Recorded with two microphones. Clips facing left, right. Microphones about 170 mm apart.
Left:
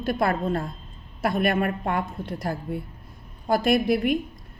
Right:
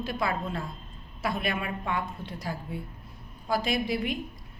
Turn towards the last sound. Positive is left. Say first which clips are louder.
# left 8 dB
turn(degrees=55)  # may be behind; listen again after turning